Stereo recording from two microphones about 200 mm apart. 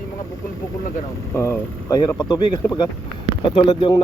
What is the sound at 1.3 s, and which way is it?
Speech, 15° left (ahead or behind).